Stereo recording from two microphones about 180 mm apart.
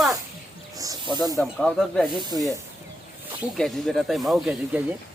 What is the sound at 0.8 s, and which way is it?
Snake, 20° right (ahead or behind).